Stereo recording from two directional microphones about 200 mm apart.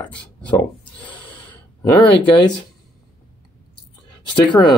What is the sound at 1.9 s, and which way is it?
Speech, 20° left (ahead or behind).